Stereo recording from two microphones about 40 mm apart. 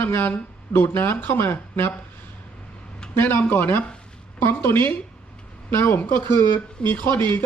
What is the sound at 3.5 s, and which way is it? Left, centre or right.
Speech, left.